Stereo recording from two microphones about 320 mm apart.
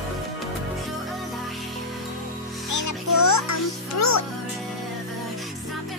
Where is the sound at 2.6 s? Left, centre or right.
Left.